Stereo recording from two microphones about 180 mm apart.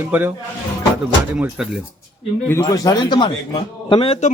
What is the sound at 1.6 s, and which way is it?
Speech, 5° right (ahead or behind).